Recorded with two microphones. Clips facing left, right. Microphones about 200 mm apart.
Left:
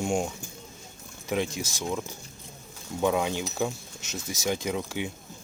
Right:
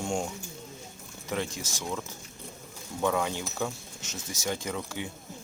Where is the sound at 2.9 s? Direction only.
15° left (ahead or behind).